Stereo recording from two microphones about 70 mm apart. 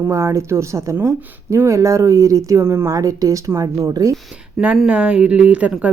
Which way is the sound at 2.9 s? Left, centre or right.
Right.